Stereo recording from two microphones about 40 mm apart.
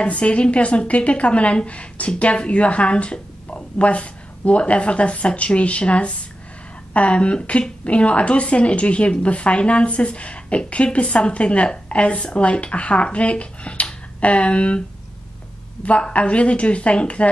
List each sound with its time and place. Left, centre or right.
0.0 s a woman's voice: left
15.8 s a woman's voice: left